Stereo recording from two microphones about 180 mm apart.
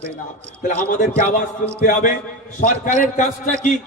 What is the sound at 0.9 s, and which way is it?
A man's voice, 45° left (ahead or behind).